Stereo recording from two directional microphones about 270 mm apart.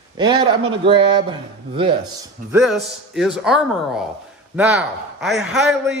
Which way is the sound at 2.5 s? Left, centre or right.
Centre.